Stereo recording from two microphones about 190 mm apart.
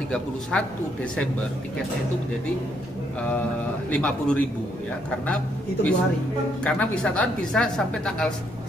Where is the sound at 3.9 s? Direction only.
5° left (ahead or behind).